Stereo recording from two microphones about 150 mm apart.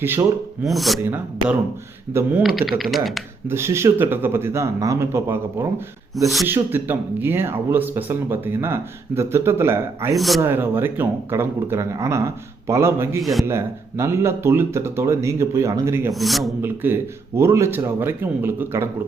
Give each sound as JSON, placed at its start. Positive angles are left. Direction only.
{"t": 0.0, "sound": "a man's voice", "side_deg": -15}
{"t": 0.6, "sound": "speech", "side_deg": 0}
{"t": 1.0, "sound": "a man's voice", "side_deg": -10}
{"t": 2.6, "sound": "speech", "side_deg": 0}
{"t": 3.5, "sound": "a man's voice", "side_deg": -15}
{"t": 10.2, "sound": "speech", "side_deg": 0}
{"t": 10.4, "sound": "a man's voice", "side_deg": -15}
{"t": 16.1, "sound": "speech", "side_deg": 0}
{"t": 16.6, "sound": "a man's voice", "side_deg": -15}